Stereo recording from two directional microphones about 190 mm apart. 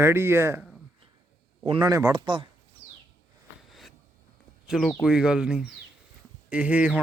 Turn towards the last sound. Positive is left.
turn(degrees=-5)  # may be behind; listen again after turning